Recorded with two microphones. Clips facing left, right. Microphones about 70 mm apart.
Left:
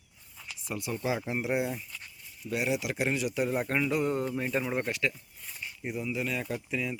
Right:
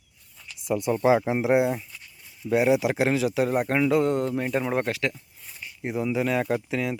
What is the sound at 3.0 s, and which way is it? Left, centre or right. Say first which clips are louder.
Speech: right 6 dB; right.